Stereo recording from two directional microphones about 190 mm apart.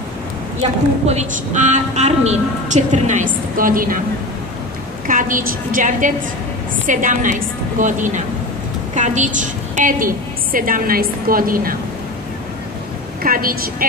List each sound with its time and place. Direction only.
0.6 s a woman's voice: 35° right (ahead or behind)
5.0 s a woman's voice: 45° right (ahead or behind)
13.2 s a woman's voice: 50° right (ahead or behind)